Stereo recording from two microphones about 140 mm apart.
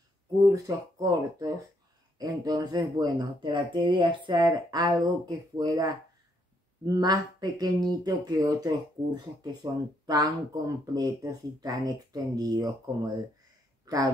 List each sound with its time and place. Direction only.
0.4 s speech: 25° right (ahead or behind)